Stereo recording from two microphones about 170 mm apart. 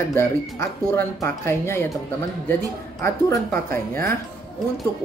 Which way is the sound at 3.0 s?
15° left (ahead or behind).